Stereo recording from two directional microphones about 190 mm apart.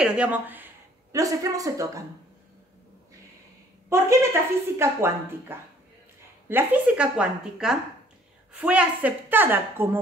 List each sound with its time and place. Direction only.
0.0 s speech: 5° right (ahead or behind)
3.9 s speech: 15° right (ahead or behind)